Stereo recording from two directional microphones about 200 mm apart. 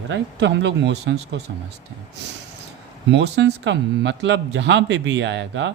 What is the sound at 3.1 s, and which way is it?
Speech, 60° right (ahead or behind).